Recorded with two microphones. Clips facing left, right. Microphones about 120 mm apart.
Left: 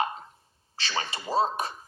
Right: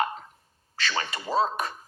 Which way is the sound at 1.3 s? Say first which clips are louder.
Even; 30° left (ahead or behind).